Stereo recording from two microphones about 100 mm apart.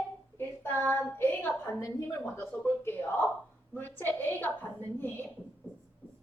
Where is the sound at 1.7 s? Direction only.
30° left (ahead or behind).